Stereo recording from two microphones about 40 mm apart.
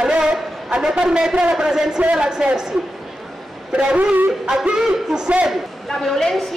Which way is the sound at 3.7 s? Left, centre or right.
Right.